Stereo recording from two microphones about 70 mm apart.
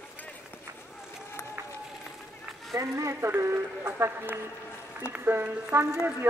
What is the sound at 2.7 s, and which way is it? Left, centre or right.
Speech, right.